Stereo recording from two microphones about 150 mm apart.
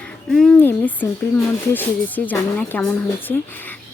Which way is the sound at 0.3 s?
Centre (ahead or behind).